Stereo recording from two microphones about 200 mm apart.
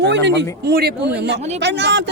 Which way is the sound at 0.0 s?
60° right (ahead or behind).